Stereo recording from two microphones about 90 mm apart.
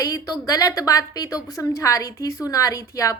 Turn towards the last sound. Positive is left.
turn(degrees=40)  # may be behind; listen again after turning